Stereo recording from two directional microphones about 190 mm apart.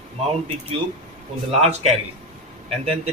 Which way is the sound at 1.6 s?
35° right (ahead or behind).